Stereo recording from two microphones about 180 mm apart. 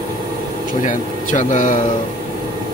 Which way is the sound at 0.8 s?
45° left (ahead or behind).